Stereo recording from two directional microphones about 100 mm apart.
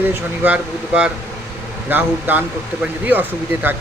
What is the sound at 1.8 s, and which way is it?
Speech, 20° right (ahead or behind).